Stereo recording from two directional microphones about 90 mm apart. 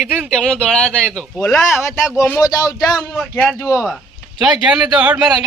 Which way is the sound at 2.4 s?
40° left (ahead or behind).